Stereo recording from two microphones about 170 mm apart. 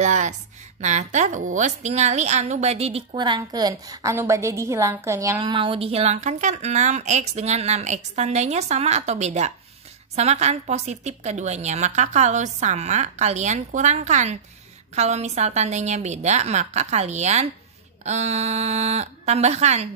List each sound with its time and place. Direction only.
0.0 s a woman's voice: 45° right (ahead or behind); by 5.4 s 15° right (ahead or behind)
5.4 s a woman's voice: 30° right (ahead or behind)